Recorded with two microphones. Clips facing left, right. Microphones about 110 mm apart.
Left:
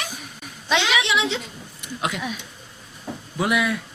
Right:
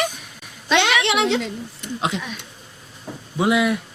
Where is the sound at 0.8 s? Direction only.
65° right (ahead or behind).